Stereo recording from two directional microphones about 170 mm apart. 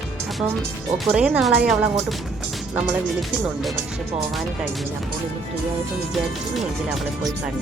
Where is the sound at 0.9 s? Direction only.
5° right (ahead or behind).